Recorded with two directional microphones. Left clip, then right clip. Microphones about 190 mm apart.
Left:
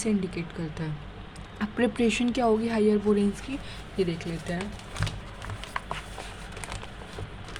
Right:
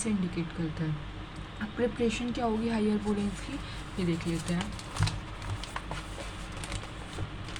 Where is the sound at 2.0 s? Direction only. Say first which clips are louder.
Left 5 dB; 40° left (ahead or behind).